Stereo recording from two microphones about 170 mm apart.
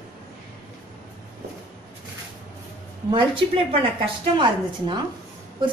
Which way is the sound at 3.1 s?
30° right (ahead or behind).